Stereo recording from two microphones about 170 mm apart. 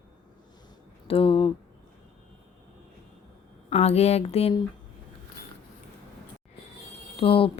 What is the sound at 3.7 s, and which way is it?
Speech, 40° left (ahead or behind).